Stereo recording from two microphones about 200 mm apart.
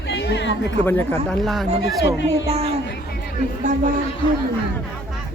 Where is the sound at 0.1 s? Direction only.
60° left (ahead or behind).